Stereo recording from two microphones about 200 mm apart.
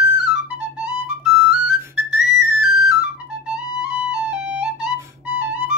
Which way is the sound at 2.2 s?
5° right (ahead or behind).